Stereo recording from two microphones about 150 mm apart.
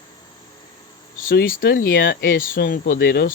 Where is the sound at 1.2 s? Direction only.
70° left (ahead or behind).